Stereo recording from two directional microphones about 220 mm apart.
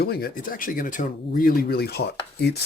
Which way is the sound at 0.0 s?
45° left (ahead or behind).